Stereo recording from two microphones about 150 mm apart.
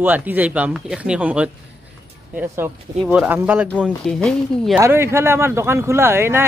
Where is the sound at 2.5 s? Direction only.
10° right (ahead or behind).